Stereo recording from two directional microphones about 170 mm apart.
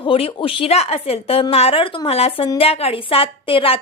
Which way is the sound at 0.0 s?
30° left (ahead or behind).